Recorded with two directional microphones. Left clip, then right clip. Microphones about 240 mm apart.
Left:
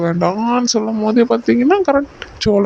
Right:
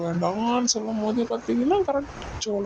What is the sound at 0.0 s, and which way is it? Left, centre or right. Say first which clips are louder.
Speech: left 9 dB; left.